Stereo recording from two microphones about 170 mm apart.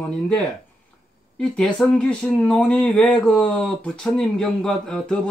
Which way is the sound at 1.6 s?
5° left (ahead or behind).